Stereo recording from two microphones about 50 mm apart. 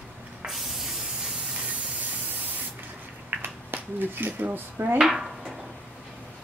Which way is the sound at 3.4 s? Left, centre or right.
Right.